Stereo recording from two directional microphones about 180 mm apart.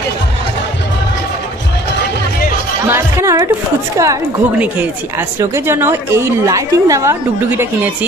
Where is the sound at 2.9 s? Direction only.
15° right (ahead or behind).